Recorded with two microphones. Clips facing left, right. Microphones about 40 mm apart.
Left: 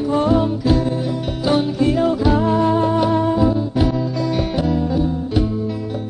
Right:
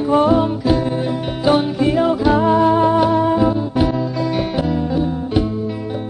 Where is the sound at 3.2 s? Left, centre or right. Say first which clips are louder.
Right 1 dB; centre.